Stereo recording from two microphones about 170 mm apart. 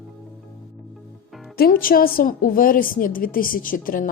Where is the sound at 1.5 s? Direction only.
60° left (ahead or behind).